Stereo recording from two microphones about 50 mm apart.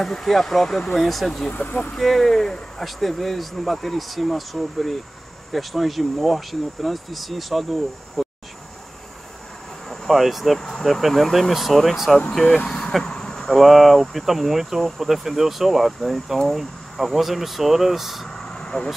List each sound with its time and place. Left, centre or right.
0.0 s speech: centre
1.5 s speech: left
2.0 s speech: centre
9.8 s speech: centre
12.3 s speech: centre
18.3 s vehicle: centre